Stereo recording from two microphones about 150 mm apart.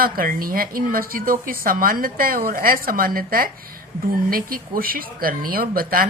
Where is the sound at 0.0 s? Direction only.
75° right (ahead or behind).